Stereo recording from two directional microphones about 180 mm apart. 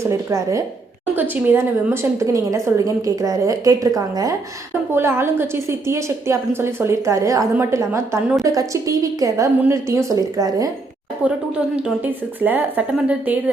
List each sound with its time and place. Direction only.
0.0 s a woman's voice: 15° right (ahead or behind)
12.0 s a woman's voice: 10° right (ahead or behind)